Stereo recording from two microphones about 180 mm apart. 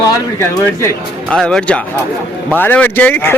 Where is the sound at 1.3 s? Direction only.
5° left (ahead or behind).